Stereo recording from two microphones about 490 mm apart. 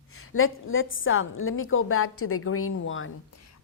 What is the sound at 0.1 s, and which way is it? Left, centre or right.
A woman's voice, left.